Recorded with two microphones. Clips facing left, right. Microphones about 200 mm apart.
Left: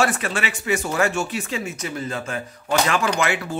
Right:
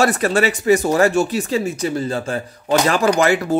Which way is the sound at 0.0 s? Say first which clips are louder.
Right 7 dB; 40° right (ahead or behind).